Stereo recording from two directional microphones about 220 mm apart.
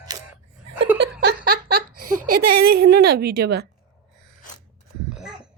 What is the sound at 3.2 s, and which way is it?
Speech, 45° right (ahead or behind).